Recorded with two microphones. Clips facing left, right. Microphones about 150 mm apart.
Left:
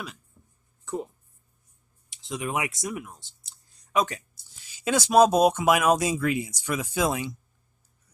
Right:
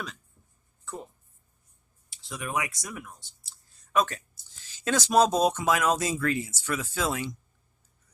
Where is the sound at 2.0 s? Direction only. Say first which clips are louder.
Left 5 dB; 20° left (ahead or behind).